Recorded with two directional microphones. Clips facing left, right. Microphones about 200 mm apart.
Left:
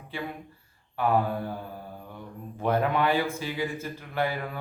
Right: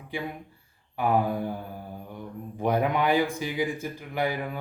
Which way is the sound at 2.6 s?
15° right (ahead or behind).